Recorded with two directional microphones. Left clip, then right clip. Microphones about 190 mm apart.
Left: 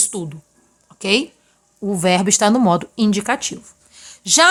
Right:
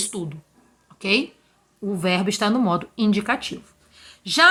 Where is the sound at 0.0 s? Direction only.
40° left (ahead or behind).